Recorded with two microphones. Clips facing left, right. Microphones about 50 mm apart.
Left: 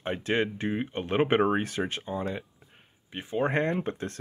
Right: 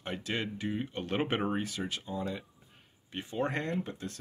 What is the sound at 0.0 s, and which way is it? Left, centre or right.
Speech, left.